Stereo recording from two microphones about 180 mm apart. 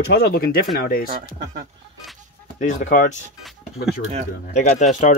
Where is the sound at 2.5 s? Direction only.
45° left (ahead or behind).